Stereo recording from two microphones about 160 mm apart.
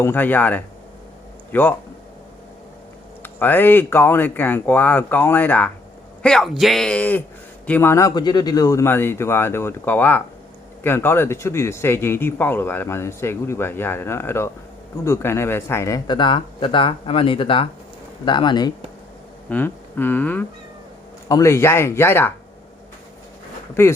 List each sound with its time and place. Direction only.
0.0 s speech: 10° left (ahead or behind)
3.2 s speech: 10° left (ahead or behind)
16.0 s speech: 30° left (ahead or behind)
19.5 s speech: 10° left (ahead or behind)
23.8 s speech: 15° left (ahead or behind)